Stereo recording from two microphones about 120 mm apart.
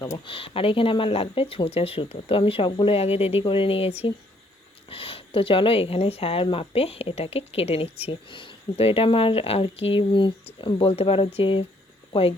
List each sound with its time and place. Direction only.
0.3 s speech: 50° left (ahead or behind)
2.9 s speech: 55° left (ahead or behind)
8.0 s speech: 45° left (ahead or behind)